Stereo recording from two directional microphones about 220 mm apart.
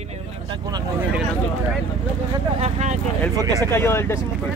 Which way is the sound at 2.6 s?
30° right (ahead or behind).